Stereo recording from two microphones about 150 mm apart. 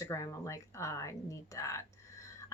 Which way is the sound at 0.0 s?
20° left (ahead or behind).